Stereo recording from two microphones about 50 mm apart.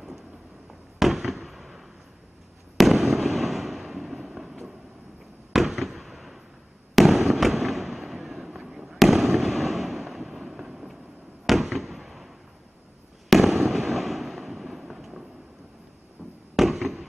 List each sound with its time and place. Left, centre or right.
0.9 s fireworks: centre
13.3 s fireworks: centre
16.5 s fireworks: centre